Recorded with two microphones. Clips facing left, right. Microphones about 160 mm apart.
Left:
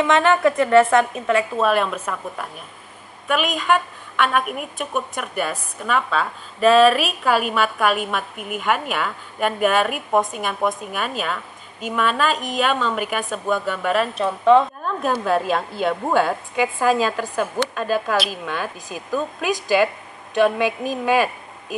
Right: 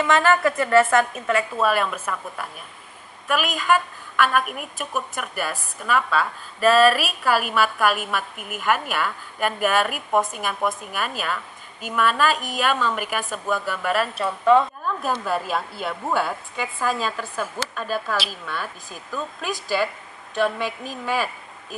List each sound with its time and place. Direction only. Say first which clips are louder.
0.0 s a woman's voice: left 2 dB; centre (ahead or behind)
17.2 s a woman's voice: left 6 dB; 15° left (ahead or behind)